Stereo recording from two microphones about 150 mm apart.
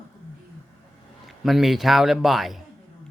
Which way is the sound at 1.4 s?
Centre (ahead or behind).